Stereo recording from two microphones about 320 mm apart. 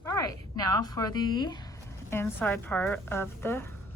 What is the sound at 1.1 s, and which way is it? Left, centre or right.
A woman's voice, centre.